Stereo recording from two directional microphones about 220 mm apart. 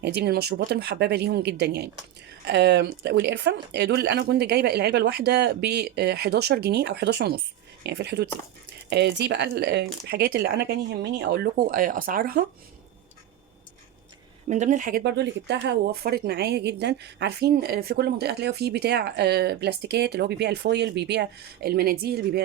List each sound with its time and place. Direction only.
0.0 s speech: 50° right (ahead or behind)
14.4 s speech: 35° right (ahead or behind)